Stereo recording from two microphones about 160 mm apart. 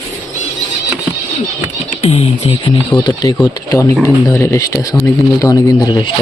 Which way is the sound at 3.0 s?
25° left (ahead or behind).